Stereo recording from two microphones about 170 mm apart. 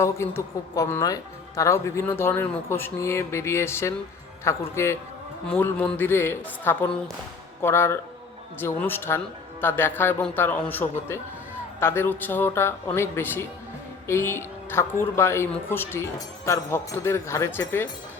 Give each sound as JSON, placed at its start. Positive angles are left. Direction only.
{"t": 0.0, "sound": "speech", "side_deg": 15}